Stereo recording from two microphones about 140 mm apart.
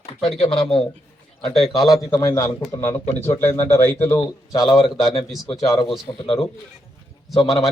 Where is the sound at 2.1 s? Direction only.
25° left (ahead or behind).